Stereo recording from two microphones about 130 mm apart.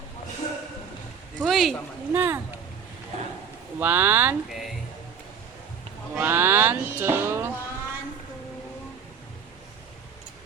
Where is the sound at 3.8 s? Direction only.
15° right (ahead or behind).